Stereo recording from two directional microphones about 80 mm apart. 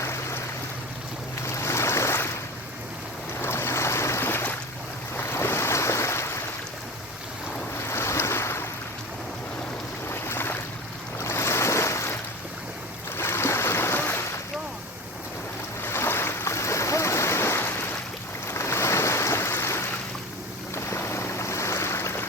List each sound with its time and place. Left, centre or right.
0.0 s stream: left
1.5 s boat: left
3.4 s boat: left
5.1 s waves: left
7.9 s waves: left
10.1 s boat: left
11.2 s waves: left
13.1 s stream: left
15.8 s stream: left
18.4 s ocean: left
20.7 s boat: left